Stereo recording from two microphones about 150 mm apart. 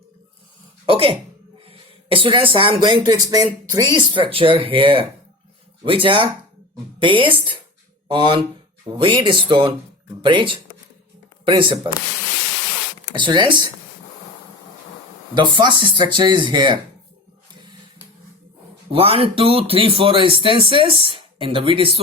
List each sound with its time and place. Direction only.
0.9 s speech: 40° right (ahead or behind)
13.1 s speech: 30° right (ahead or behind)
15.4 s speech: 30° right (ahead or behind)
18.9 s speech: 40° right (ahead or behind)